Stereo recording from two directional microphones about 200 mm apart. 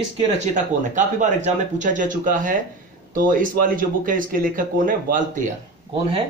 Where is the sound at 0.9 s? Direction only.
35° right (ahead or behind).